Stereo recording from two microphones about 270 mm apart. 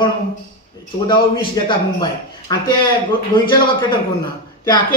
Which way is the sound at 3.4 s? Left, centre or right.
Centre.